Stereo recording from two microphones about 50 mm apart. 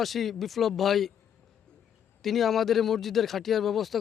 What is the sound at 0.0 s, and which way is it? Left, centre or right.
Speech, centre.